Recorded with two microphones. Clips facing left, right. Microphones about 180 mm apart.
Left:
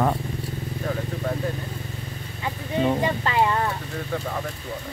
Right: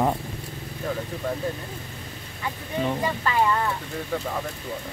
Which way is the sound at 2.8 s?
20° left (ahead or behind).